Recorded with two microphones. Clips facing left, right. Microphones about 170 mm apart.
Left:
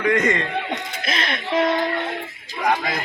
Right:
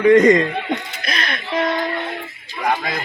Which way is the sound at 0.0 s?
35° right (ahead or behind).